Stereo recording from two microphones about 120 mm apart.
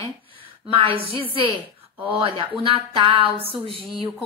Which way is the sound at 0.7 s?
50° right (ahead or behind).